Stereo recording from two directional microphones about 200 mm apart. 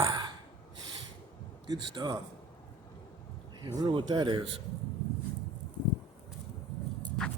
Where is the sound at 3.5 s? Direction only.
20° right (ahead or behind).